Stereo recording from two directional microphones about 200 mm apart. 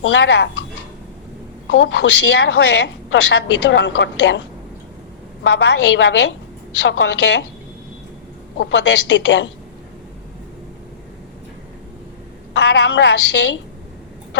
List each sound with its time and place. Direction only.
0.0 s a woman's voice: 65° left (ahead or behind)
1.6 s a woman's voice: 65° left (ahead or behind)
8.5 s a woman's voice: 65° left (ahead or behind)
12.5 s a woman's voice: 60° left (ahead or behind)